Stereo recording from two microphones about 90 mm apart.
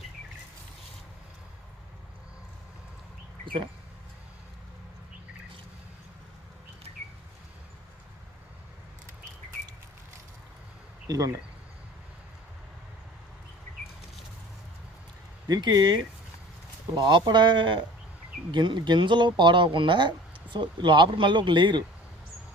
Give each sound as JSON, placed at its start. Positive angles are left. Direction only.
{"t": 11.1, "sound": "speech", "side_deg": -40}
{"t": 15.4, "sound": "speech", "side_deg": -50}